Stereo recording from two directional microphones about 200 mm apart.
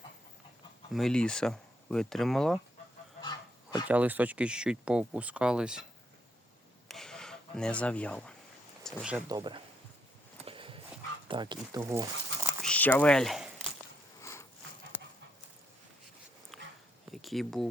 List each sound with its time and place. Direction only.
0.9 s speech: 5° left (ahead or behind)
3.8 s speech: 10° right (ahead or behind)
6.8 s a sound: centre (ahead or behind)
8.8 s speech: centre (ahead or behind)
9.3 s speech: 25° right (ahead or behind)
10.4 s horse: 25° right (ahead or behind)
11.3 s speech: 25° right (ahead or behind)
12.6 s speech: 5° left (ahead or behind)
14.2 s a sound: 15° left (ahead or behind)
16.5 s dog: centre (ahead or behind)
17.1 s a sound: centre (ahead or behind)